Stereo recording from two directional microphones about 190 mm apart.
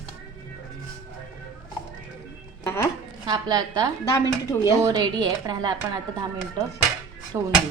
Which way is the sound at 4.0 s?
15° left (ahead or behind).